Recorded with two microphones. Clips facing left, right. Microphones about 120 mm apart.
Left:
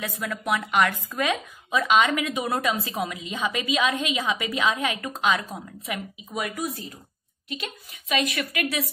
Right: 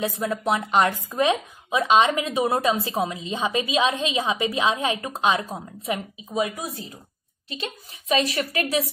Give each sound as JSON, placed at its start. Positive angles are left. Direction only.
{"t": 0.0, "sound": "speech", "side_deg": -30}
{"t": 8.1, "sound": "speech", "side_deg": -35}